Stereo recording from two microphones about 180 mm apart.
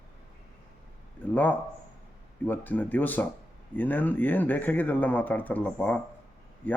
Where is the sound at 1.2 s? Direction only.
10° left (ahead or behind).